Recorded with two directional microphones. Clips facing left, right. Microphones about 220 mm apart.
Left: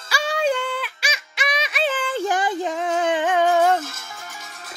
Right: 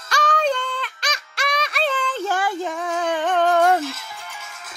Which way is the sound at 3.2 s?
10° left (ahead or behind).